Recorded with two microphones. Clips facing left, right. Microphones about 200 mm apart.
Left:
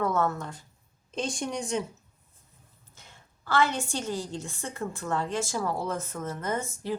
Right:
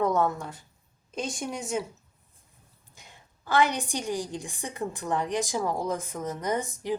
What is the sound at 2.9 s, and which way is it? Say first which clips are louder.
A woman's voice: right 2 dB; 15° right (ahead or behind).